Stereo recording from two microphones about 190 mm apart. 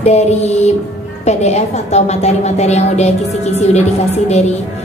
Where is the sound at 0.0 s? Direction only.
35° left (ahead or behind).